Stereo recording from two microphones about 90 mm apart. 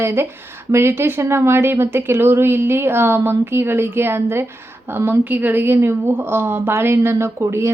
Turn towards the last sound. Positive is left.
turn(degrees=-30)  # may be behind; listen again after turning